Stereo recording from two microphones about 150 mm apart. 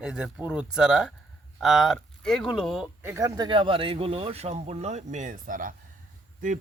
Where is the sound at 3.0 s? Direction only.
20° right (ahead or behind); by 5.7 s 60° right (ahead or behind).